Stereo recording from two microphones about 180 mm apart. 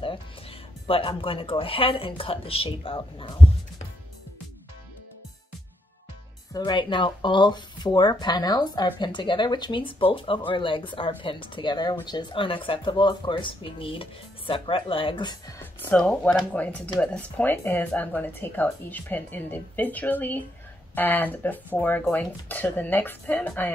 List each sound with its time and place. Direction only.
0.0 s speech: 30° left (ahead or behind)
6.5 s speech: 25° left (ahead or behind)
15.9 s speech: 5° left (ahead or behind)